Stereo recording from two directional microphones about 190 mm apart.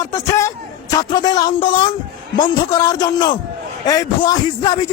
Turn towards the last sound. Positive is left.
turn(degrees=20)  # may be behind; listen again after turning